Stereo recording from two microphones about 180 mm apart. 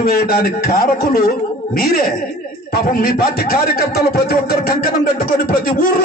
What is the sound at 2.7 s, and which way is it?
A man's voice, 55° left (ahead or behind).